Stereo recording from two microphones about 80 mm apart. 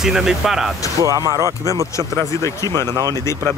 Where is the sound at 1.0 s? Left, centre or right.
Right.